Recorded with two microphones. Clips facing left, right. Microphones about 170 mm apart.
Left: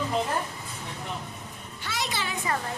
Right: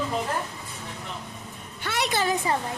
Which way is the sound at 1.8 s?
60° right (ahead or behind).